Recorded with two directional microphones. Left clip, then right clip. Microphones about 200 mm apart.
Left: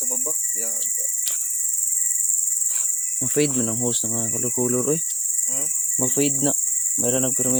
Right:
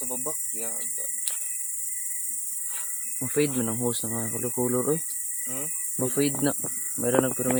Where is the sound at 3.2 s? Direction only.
25° left (ahead or behind).